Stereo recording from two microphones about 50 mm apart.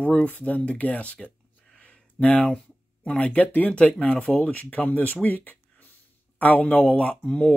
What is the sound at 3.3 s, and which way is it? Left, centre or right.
Speech, left.